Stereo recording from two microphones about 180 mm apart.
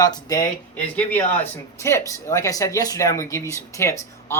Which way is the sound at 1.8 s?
15° left (ahead or behind).